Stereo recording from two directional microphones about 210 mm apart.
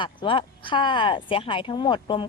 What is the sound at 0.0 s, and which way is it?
A woman's voice, 25° left (ahead or behind).